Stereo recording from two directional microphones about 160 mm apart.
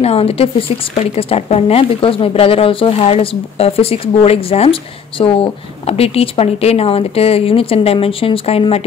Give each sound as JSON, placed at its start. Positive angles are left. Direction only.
{"t": 0.0, "sound": "a woman's voice", "side_deg": 40}